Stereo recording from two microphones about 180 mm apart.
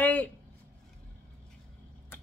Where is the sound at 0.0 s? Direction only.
10° left (ahead or behind).